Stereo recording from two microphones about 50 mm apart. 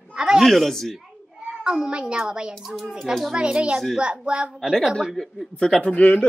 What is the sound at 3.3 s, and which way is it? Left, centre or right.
A woman's voice, centre.